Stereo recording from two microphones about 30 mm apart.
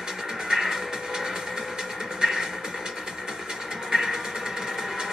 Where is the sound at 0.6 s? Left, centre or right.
Centre.